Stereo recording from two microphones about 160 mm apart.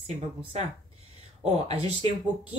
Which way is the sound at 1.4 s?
40° right (ahead or behind).